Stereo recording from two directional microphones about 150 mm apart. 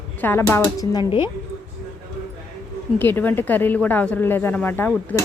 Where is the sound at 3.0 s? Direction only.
10° left (ahead or behind).